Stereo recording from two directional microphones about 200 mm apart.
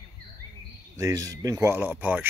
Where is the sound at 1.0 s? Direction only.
15° right (ahead or behind).